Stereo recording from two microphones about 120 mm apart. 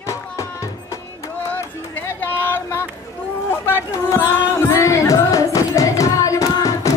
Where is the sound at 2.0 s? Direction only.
20° left (ahead or behind).